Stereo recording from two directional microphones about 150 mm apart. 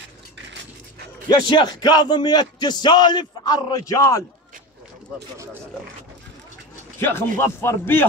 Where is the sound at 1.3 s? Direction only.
30° left (ahead or behind).